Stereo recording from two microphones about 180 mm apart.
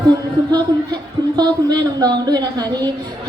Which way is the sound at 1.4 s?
20° right (ahead or behind).